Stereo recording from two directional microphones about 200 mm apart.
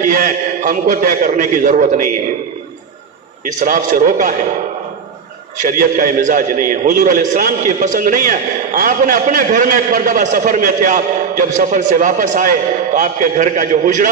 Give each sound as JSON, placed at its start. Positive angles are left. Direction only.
{"t": 0.0, "sound": "a man's voice", "side_deg": -40}
{"t": 3.4, "sound": "a man's voice", "side_deg": -40}
{"t": 5.6, "sound": "a man's voice", "side_deg": -45}